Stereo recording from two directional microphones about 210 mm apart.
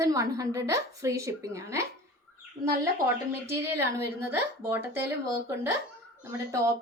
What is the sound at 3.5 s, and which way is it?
Speech, 10° right (ahead or behind).